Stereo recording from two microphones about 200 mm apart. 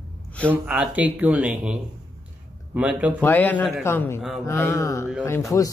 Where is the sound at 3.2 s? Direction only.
10° left (ahead or behind).